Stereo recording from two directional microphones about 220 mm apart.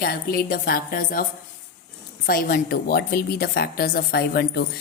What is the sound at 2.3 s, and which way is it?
A woman's voice, 40° left (ahead or behind).